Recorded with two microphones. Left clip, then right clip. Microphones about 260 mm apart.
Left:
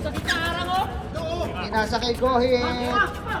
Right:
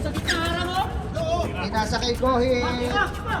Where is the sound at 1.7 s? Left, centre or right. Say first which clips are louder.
Left 1 dB; centre.